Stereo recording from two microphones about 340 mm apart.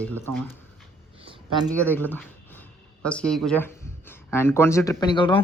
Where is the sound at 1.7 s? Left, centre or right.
Centre.